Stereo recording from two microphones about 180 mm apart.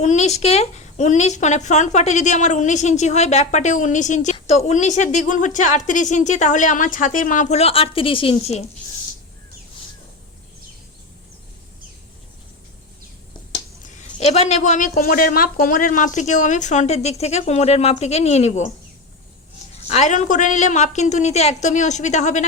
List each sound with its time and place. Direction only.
0.0 s speech: 40° left (ahead or behind)
13.8 s speech: 40° left (ahead or behind)
19.7 s speech: 40° left (ahead or behind)